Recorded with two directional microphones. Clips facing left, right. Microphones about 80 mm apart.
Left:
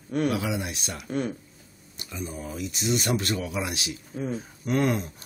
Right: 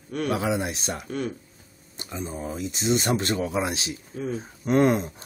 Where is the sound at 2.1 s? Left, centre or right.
Right.